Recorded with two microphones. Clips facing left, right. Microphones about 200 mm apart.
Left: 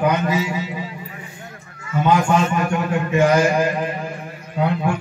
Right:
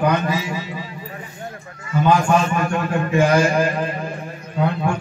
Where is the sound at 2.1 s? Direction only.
20° left (ahead or behind).